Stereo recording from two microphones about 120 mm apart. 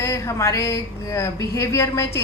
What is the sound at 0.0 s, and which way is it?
A woman's voice, 25° left (ahead or behind).